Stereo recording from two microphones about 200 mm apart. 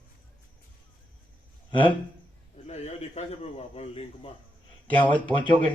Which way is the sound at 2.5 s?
30° left (ahead or behind).